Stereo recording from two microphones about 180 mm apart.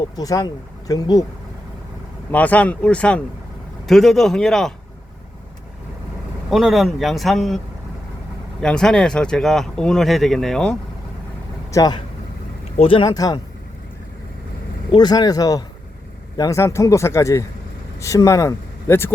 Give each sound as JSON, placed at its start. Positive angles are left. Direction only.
{"t": 0.2, "sound": "speech", "side_deg": 20}
{"t": 2.3, "sound": "speech", "side_deg": 10}
{"t": 6.5, "sound": "speech", "side_deg": 0}
{"t": 8.6, "sound": "speech", "side_deg": 5}
{"t": 11.7, "sound": "speech", "side_deg": 20}
{"t": 14.8, "sound": "speech", "side_deg": 25}